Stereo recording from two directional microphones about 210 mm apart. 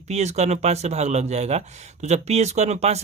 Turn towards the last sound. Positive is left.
turn(degrees=-30)  # may be behind; listen again after turning